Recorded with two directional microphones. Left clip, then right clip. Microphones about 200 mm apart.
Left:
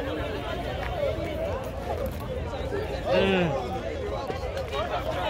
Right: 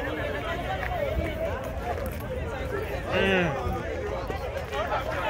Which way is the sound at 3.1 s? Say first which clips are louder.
Left 1 dB; 50° left (ahead or behind).